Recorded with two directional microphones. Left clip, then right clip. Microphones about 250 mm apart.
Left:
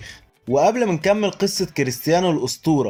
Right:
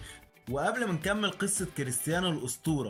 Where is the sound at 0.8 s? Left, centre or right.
Centre.